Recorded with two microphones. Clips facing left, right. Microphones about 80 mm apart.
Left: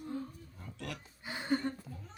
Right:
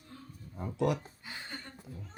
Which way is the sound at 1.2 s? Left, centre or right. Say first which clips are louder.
Left 11 dB; left.